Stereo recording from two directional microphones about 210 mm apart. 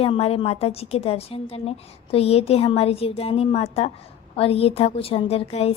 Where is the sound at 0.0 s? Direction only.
30° left (ahead or behind).